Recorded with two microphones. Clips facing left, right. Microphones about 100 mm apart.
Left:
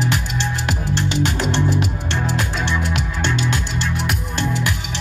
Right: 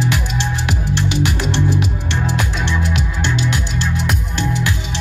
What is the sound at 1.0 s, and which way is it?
Music, 15° right (ahead or behind).